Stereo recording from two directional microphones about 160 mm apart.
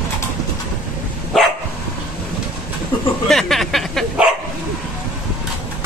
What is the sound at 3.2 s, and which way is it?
Bow-wow, centre (ahead or behind).